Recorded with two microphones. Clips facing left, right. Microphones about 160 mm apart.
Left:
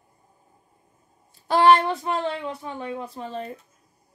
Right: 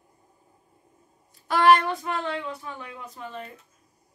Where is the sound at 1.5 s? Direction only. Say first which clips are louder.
Left 2 dB; 30° left (ahead or behind).